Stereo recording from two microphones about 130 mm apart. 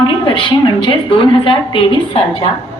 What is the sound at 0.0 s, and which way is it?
A woman's voice, 40° left (ahead or behind).